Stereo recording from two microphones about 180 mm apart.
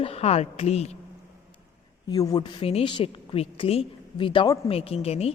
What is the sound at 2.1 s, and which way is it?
A woman's voice, 20° left (ahead or behind).